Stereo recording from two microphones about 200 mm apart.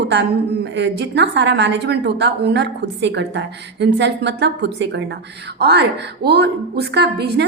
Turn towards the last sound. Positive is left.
turn(degrees=-55)  # may be behind; listen again after turning